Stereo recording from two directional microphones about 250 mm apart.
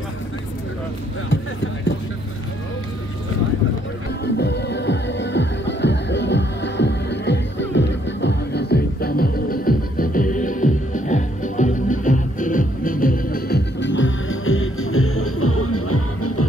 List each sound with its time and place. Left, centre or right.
4.2 s music: left